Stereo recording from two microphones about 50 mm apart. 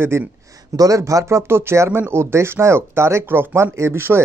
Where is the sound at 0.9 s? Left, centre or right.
Right.